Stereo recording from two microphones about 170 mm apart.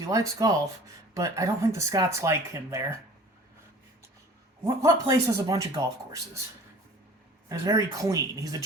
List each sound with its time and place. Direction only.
0.0 s speech: 20° right (ahead or behind)
4.6 s speech: 15° right (ahead or behind)
7.4 s speech: 20° right (ahead or behind)